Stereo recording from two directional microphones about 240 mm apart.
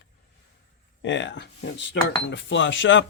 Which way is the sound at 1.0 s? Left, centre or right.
Left.